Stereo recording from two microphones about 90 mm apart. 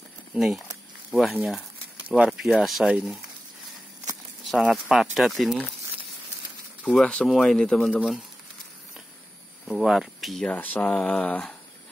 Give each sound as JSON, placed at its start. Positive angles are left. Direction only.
{"t": 0.3, "sound": "speech", "side_deg": -5}
{"t": 4.5, "sound": "speech", "side_deg": -5}
{"t": 6.8, "sound": "speech", "side_deg": 10}
{"t": 9.7, "sound": "speech", "side_deg": -5}
{"t": 10.5, "sound": "speech", "side_deg": 15}
{"t": 11.0, "sound": "speech", "side_deg": 5}